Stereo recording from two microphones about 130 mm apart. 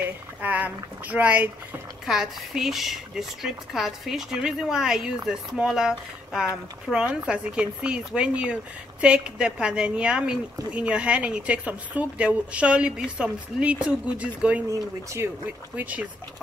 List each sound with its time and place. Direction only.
0.0 s speech: 10° right (ahead or behind)
14.7 s speech: 25° right (ahead or behind)
15.7 s speech: 10° right (ahead or behind)